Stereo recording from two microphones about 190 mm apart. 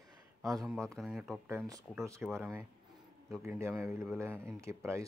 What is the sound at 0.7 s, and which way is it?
A man's voice, 5° left (ahead or behind).